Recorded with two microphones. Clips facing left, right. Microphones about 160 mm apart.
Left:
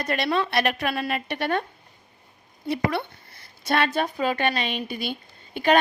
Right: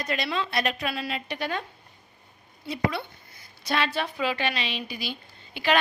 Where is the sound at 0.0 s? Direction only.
50° left (ahead or behind).